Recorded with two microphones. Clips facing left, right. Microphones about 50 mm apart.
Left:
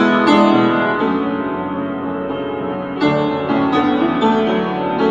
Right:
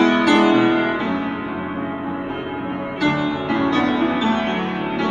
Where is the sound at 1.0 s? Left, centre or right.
Left.